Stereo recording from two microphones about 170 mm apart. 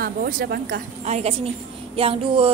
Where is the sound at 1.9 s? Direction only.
35° right (ahead or behind).